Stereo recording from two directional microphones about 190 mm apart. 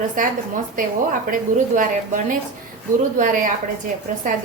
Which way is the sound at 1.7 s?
45° right (ahead or behind).